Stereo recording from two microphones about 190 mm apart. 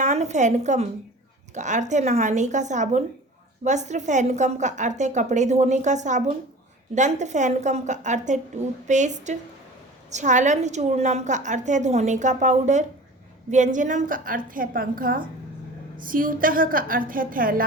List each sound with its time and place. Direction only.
0.0 s a woman's voice: 40° right (ahead or behind)